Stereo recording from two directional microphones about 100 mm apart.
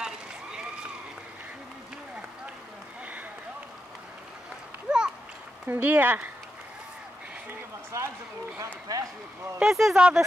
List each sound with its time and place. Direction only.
0.0 s a sound: 10° right (ahead or behind)
4.8 s a sound: 10° right (ahead or behind)
5.7 s speech: 20° right (ahead or behind)
7.9 s run: 30° right (ahead or behind)
8.9 s speech: 35° right (ahead or behind)
9.6 s speech: 5° right (ahead or behind)